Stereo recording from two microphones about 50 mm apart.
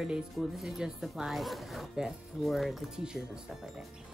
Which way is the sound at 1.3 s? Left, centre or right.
Centre.